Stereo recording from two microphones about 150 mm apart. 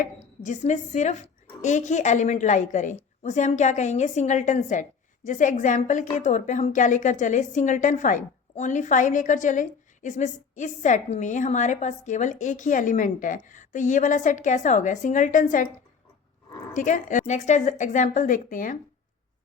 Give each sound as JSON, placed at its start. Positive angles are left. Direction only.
{"t": 0.0, "sound": "a woman's voice", "side_deg": 55}
{"t": 16.7, "sound": "a woman's voice", "side_deg": 60}